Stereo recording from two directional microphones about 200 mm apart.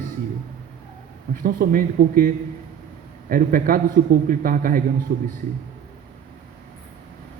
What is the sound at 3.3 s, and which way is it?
A man's voice, 45° right (ahead or behind).